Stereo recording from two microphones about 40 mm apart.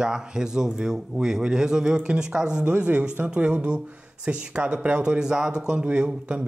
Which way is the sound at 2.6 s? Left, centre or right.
Right.